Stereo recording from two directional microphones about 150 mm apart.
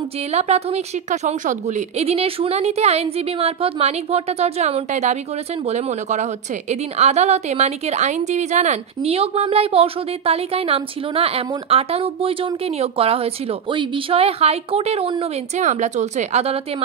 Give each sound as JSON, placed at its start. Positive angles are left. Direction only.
{"t": 0.3, "sound": "a woman's voice", "side_deg": -45}
{"t": 15.5, "sound": "a woman's voice", "side_deg": -50}